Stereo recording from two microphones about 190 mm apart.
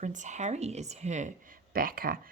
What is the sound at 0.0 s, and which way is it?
Speech, 40° right (ahead or behind).